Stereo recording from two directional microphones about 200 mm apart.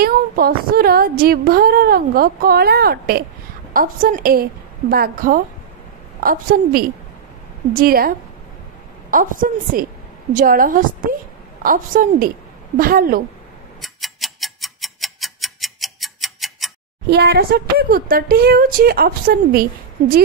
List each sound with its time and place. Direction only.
0.0 s speech: 50° right (ahead or behind)
9.1 s speech: 40° right (ahead or behind)
13.7 s tick-tock: centre (ahead or behind)
17.1 s speech: 55° right (ahead or behind)